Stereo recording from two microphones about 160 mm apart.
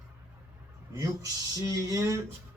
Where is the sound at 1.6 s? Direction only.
20° right (ahead or behind).